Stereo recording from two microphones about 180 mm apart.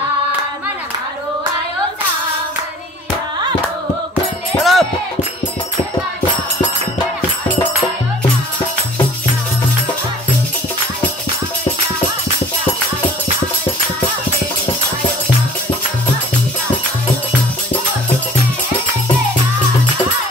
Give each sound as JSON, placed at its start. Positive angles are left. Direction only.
{"t": 4.6, "sound": "music", "side_deg": 0}